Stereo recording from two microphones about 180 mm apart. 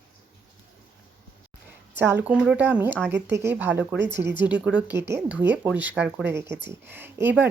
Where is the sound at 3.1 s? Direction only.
75° right (ahead or behind).